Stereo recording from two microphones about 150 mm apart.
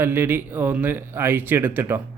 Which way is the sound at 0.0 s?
15° right (ahead or behind).